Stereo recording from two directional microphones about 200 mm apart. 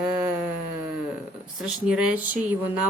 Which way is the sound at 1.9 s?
5° right (ahead or behind).